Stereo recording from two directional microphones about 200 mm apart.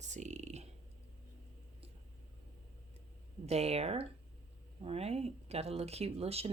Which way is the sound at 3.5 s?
30° right (ahead or behind).